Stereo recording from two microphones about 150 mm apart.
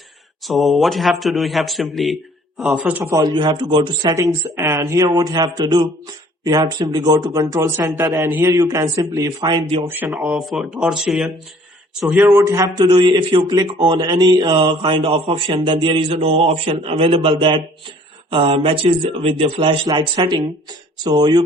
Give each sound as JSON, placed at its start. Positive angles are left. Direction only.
{"t": 0.4, "sound": "a man's voice", "side_deg": 0}
{"t": 9.5, "sound": "a man's voice", "side_deg": -35}
{"t": 9.8, "sound": "a man's voice", "side_deg": -15}
{"t": 10.1, "sound": "a man's voice", "side_deg": -5}